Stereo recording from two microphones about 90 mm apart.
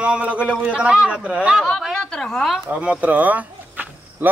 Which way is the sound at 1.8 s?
5° left (ahead or behind).